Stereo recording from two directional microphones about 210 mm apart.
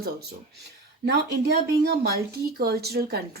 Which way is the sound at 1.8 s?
45° right (ahead or behind).